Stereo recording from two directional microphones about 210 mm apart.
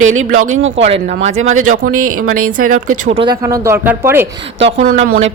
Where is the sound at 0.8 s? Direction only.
30° right (ahead or behind).